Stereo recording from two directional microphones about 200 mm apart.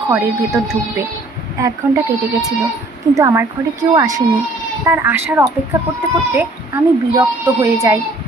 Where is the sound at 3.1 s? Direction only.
15° right (ahead or behind).